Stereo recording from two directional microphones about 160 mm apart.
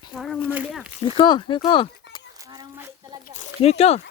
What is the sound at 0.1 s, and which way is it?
Speech, 5° right (ahead or behind).